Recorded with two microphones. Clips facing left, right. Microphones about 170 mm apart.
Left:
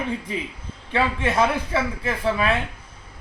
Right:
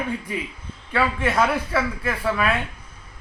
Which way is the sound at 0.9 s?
25° left (ahead or behind).